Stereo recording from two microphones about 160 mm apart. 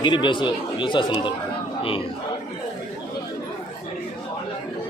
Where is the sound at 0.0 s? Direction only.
30° left (ahead or behind).